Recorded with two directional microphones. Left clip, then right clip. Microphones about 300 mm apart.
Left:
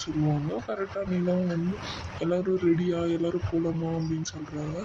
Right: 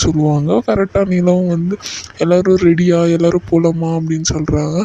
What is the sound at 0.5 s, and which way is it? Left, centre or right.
Speech, right.